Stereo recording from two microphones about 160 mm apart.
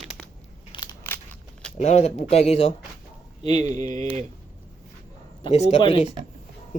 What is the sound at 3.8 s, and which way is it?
Speech, 55° right (ahead or behind).